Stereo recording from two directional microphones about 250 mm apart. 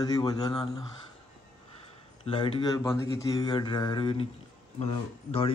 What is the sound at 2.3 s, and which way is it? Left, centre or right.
Speech, centre.